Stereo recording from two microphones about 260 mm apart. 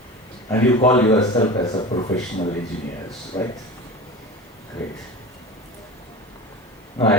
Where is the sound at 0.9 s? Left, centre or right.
Centre.